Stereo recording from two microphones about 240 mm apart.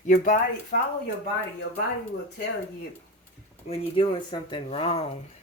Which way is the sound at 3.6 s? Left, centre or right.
Left.